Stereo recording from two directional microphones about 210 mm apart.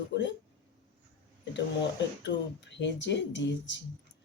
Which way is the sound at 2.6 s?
60° left (ahead or behind).